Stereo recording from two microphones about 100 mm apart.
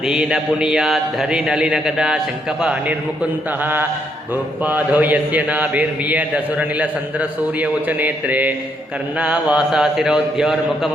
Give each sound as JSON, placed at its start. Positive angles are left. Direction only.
{"t": 0.0, "sound": "a man's voice", "side_deg": -5}
{"t": 3.6, "sound": "mantra", "side_deg": -20}
{"t": 4.6, "sound": "a man's voice", "side_deg": -15}